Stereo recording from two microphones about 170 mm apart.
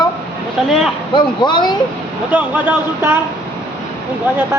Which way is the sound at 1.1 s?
25° left (ahead or behind).